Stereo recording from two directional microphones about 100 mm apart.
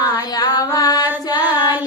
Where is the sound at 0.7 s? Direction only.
40° left (ahead or behind).